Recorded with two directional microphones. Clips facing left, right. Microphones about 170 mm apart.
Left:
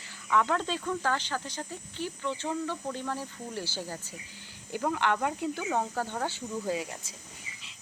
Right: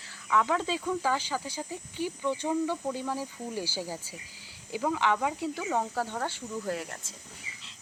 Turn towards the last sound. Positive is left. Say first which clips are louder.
# left 2 dB
turn(degrees=15)  # may be behind; listen again after turning